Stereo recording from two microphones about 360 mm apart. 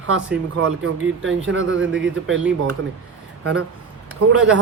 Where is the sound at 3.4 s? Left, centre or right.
Right.